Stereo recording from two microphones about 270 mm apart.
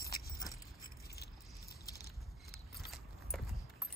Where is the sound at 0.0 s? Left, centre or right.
Left.